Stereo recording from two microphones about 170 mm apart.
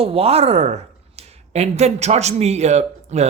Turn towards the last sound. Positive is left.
turn(degrees=-40)  # may be behind; listen again after turning